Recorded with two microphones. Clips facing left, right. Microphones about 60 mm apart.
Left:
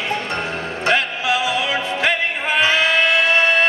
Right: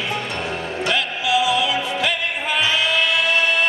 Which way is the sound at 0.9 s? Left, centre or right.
Left.